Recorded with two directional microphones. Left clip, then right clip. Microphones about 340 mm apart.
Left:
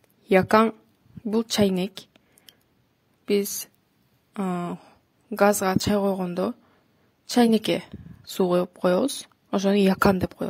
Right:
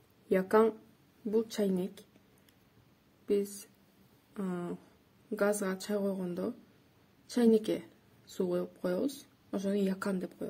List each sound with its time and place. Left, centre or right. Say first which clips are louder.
0.3 s a woman's voice: left 8 dB; left
4.3 s a woman's voice: left 10 dB; left